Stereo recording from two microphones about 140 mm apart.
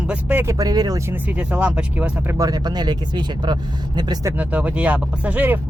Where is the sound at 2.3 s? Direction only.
25° right (ahead or behind).